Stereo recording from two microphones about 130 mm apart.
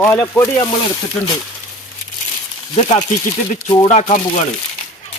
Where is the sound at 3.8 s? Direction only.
65° left (ahead or behind).